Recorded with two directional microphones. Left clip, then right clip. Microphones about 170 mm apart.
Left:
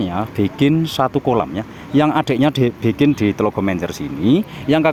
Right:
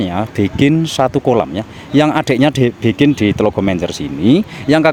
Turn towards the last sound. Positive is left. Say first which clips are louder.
# right 4 dB
turn(degrees=-50)  # may be behind; listen again after turning